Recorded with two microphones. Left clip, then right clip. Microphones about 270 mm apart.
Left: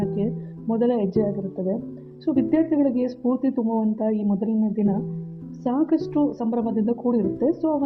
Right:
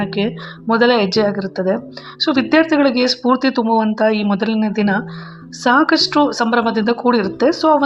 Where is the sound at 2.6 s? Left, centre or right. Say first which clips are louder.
Right 11 dB; right.